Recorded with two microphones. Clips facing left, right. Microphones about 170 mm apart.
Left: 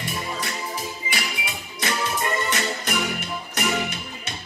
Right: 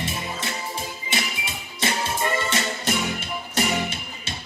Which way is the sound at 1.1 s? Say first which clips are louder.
Right 4 dB; 25° right (ahead or behind).